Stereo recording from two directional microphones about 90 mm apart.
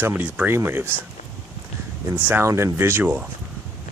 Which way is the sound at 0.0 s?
20° right (ahead or behind).